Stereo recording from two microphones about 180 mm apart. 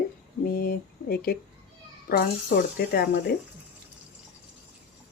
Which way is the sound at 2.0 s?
55° left (ahead or behind).